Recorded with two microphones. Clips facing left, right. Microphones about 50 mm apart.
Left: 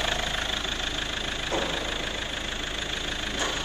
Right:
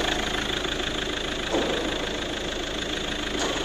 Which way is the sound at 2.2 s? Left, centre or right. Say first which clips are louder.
Right 3 dB; centre.